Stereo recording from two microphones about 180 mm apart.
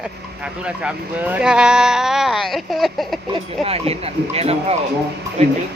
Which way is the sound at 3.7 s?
35° right (ahead or behind).